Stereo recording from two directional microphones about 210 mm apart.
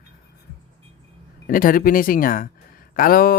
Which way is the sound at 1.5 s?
40° left (ahead or behind).